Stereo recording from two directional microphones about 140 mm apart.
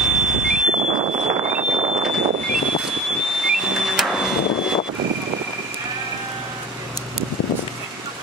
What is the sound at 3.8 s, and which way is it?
Vehicle, 5° right (ahead or behind).